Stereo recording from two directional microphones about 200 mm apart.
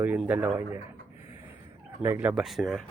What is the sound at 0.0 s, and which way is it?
Speech, 10° right (ahead or behind).